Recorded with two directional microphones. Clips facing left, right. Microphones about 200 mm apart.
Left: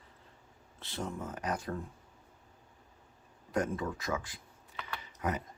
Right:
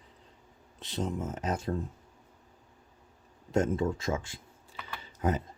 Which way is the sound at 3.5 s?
25° right (ahead or behind).